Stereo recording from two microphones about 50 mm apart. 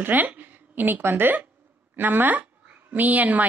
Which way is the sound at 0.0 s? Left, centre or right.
Right.